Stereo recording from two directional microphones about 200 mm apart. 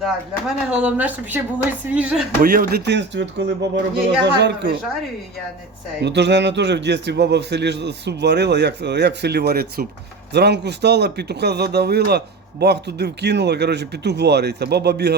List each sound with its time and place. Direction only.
0.0 s speech: 5° right (ahead or behind)
2.4 s a man's voice: 45° right (ahead or behind)
6.0 s a man's voice: 60° right (ahead or behind)